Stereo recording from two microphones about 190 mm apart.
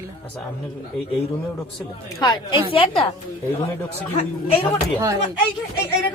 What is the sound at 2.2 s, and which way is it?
Speech, 25° left (ahead or behind).